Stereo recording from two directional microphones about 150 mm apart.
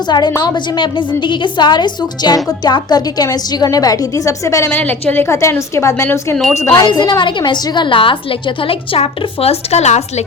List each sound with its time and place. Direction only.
0.1 s a woman's voice: 25° left (ahead or behind)
6.7 s a woman's voice: 30° left (ahead or behind); by 10.2 s 50° left (ahead or behind)